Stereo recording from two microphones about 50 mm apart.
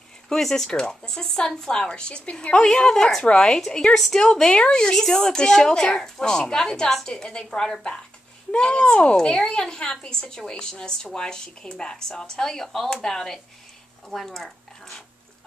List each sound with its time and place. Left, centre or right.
0.4 s a woman's voice: centre